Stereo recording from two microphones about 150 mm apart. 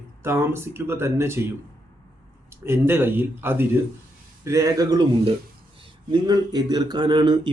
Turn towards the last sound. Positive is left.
turn(degrees=-30)  # may be behind; listen again after turning